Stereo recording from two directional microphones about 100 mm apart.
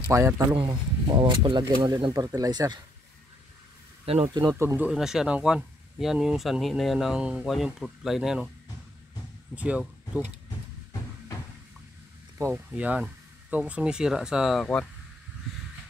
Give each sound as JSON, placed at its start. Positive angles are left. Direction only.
{"t": 0.1, "sound": "speech", "side_deg": -25}
{"t": 0.7, "sound": "speech", "side_deg": -45}
{"t": 4.3, "sound": "speech", "side_deg": -40}
{"t": 4.6, "sound": "speech", "side_deg": -25}
{"t": 4.8, "sound": "speech", "side_deg": -5}
{"t": 9.6, "sound": "speech", "side_deg": -15}
{"t": 12.4, "sound": "speech", "side_deg": -30}
{"t": 12.7, "sound": "speech", "side_deg": -15}
{"t": 14.6, "sound": "speech", "side_deg": 10}